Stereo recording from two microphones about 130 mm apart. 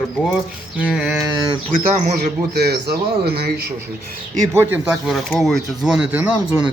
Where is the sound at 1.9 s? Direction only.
70° right (ahead or behind).